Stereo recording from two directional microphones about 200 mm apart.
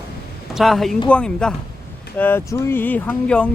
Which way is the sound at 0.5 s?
Centre (ahead or behind).